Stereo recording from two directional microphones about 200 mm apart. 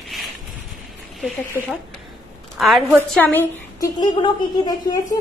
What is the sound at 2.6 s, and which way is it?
Speech, 5° right (ahead or behind).